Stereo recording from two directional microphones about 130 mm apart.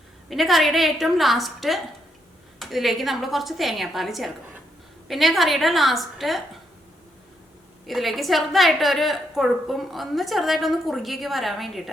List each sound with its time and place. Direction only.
0.3 s a woman's voice: centre (ahead or behind)
7.9 s a woman's voice: centre (ahead or behind)